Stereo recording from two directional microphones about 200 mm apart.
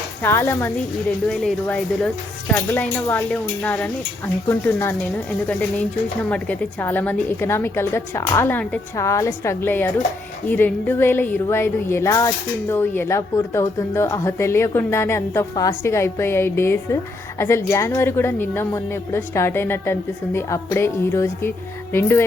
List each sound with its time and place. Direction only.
0.2 s speech: 10° left (ahead or behind)